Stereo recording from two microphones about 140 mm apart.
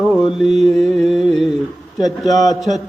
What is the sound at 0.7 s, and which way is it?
Carnatic music, 5° left (ahead or behind).